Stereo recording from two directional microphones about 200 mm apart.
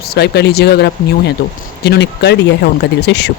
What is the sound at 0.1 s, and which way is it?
Speech, 55° left (ahead or behind).